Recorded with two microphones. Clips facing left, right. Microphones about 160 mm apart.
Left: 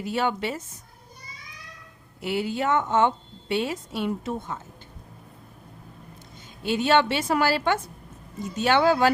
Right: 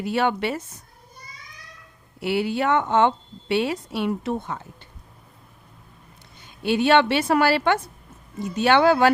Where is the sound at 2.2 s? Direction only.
70° right (ahead or behind).